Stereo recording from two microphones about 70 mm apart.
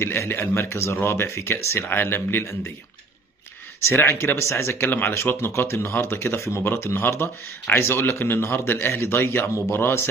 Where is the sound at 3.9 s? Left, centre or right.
Left.